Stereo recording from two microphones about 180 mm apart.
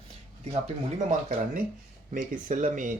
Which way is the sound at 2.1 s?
45° right (ahead or behind).